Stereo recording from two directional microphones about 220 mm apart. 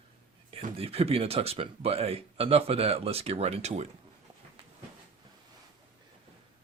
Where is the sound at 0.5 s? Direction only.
25° right (ahead or behind).